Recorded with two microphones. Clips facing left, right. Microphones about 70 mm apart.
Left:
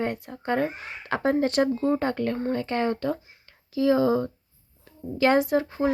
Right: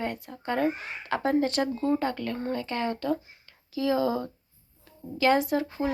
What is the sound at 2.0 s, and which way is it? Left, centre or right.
Speech, left.